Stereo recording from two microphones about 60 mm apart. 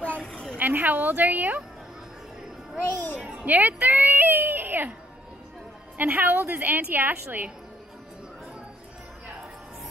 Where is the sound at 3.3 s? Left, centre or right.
Right.